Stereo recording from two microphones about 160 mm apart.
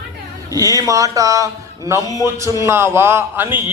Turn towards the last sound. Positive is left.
turn(degrees=-15)  # may be behind; listen again after turning